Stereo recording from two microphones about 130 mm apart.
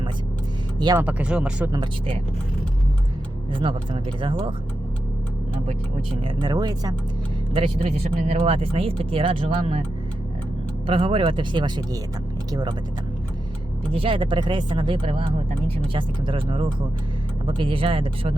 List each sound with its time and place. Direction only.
0.9 s speech: 10° right (ahead or behind)
3.5 s speech: 40° right (ahead or behind)
6.2 s speech: 35° right (ahead or behind)
7.5 s speech: 45° right (ahead or behind)
10.8 s speech: 45° right (ahead or behind)
13.9 s speech: 45° right (ahead or behind)